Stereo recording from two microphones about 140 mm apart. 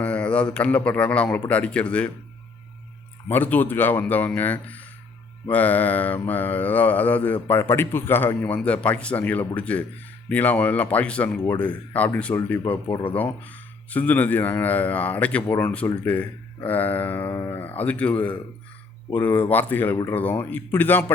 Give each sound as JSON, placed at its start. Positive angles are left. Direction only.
{"t": 0.0, "sound": "speech", "side_deg": 10}
{"t": 3.2, "sound": "speech", "side_deg": 15}